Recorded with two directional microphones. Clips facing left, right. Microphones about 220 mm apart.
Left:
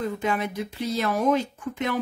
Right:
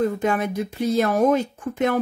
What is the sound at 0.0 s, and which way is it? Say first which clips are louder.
Speech: right 5 dB; 45° right (ahead or behind).